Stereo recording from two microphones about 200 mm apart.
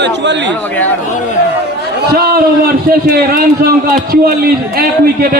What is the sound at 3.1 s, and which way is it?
A man's voice, 50° right (ahead or behind).